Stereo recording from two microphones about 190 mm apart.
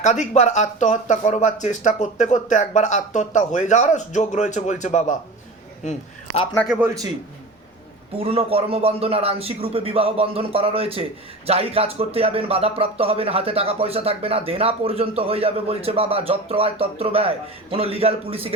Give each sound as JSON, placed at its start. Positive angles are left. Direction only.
{"t": 0.0, "sound": "a man's voice", "side_deg": 40}
{"t": 6.7, "sound": "a man's voice", "side_deg": -10}
{"t": 8.2, "sound": "speech", "side_deg": -30}